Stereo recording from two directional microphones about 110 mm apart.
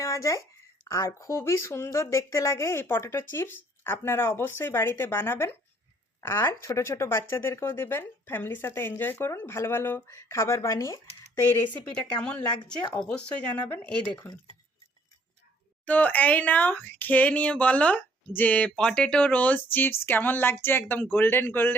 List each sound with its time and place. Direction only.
0.0 s a sound: 30° left (ahead or behind)
0.9 s speech: 30° left (ahead or behind)
11.9 s speech: 10° left (ahead or behind)
15.9 s speech: 15° left (ahead or behind)